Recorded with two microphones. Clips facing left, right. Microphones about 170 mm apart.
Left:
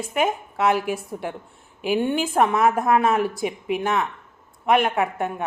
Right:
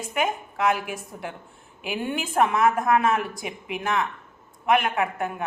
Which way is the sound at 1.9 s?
30° left (ahead or behind).